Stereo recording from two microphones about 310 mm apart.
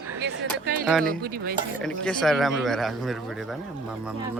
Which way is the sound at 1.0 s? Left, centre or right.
Right.